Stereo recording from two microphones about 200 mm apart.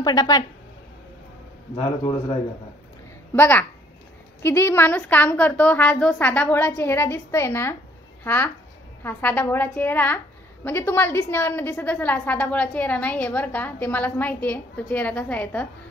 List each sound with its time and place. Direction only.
0.0 s speech: 20° left (ahead or behind)
1.8 s speech: 25° left (ahead or behind)
3.3 s a woman's voice: 10° left (ahead or behind)